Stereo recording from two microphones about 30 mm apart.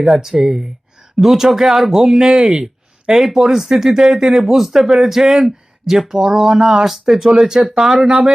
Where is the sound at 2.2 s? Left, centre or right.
Right.